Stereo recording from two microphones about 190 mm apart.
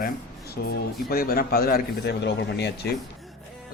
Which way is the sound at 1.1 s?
50° left (ahead or behind).